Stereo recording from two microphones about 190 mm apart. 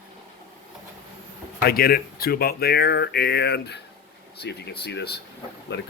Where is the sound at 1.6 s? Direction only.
50° left (ahead or behind).